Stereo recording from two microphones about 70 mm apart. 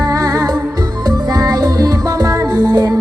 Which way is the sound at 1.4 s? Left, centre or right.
Right.